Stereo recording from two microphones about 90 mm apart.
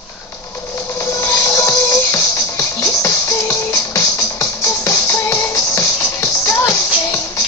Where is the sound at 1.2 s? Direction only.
25° left (ahead or behind).